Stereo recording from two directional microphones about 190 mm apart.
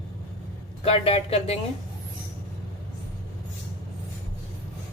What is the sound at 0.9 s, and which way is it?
Speech, 30° left (ahead or behind).